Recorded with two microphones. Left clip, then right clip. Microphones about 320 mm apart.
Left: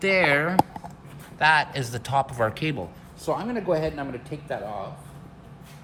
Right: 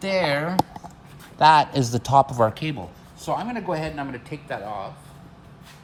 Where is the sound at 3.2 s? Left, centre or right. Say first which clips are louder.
Left 1 dB; right.